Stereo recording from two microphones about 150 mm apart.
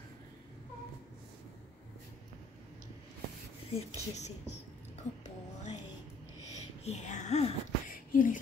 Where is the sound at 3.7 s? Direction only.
45° left (ahead or behind).